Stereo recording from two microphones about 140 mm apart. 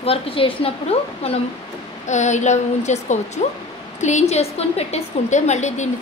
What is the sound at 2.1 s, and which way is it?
A woman's voice, 60° left (ahead or behind).